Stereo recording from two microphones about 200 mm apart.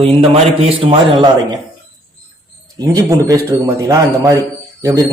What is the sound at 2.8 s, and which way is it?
A man's voice, 15° right (ahead or behind).